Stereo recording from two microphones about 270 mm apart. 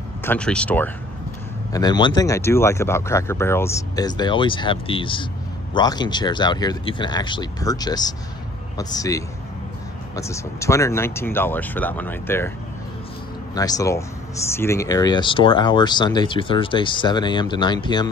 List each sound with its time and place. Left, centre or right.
0.2 s speech: centre
13.6 s speech: centre